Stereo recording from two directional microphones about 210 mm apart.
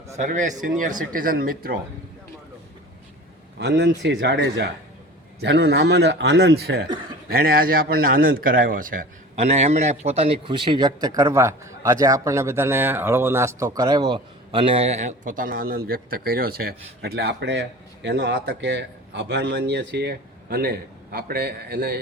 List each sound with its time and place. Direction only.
0.2 s speech: 35° right (ahead or behind)
3.6 s a man's voice: 55° right (ahead or behind)